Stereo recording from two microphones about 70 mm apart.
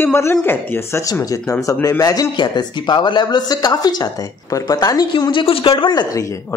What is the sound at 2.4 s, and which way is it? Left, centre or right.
Speech, left.